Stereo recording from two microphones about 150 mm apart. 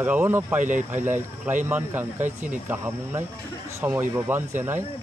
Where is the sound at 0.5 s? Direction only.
60° right (ahead or behind).